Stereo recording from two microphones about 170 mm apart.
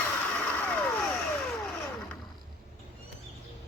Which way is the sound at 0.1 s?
10° left (ahead or behind).